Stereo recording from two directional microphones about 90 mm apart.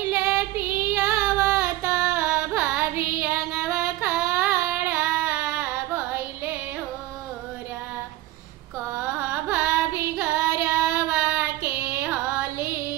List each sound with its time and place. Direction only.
0.0 s child singing: 20° right (ahead or behind)
1.9 s female singing: 20° right (ahead or behind)
2.8 s child singing: 20° right (ahead or behind)
3.3 s female singing: 10° right (ahead or behind)
4.4 s a sound: 20° right (ahead or behind)
5.2 s carnatic music: 20° right (ahead or behind)
9.2 s carnatic music: 20° right (ahead or behind)
10.1 s child singing: 15° right (ahead or behind)
11.3 s child singing: 25° right (ahead or behind)